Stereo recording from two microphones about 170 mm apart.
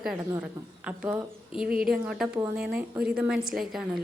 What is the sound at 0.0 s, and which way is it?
A woman's voice, 5° right (ahead or behind).